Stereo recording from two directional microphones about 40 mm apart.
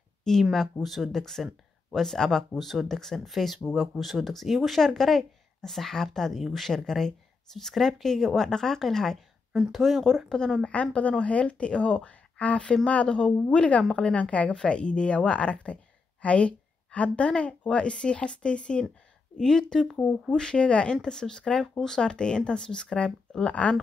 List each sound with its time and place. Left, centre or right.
0.3 s speech: centre
0.8 s speech: centre
4.0 s speech: centre
10.4 s a woman's voice: centre
11.0 s a woman's voice: left
13.8 s speech: centre
14.1 s a woman's voice: left; by 19.9 s centre
20.0 s a woman's voice: left
20.3 s a woman's voice: left